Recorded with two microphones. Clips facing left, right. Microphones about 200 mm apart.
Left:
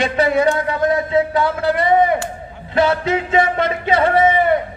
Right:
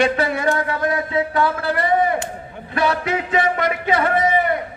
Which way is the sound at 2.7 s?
25° left (ahead or behind).